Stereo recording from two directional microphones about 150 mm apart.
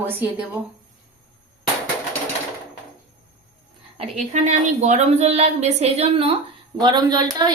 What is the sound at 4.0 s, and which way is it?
A woman's voice, 50° right (ahead or behind).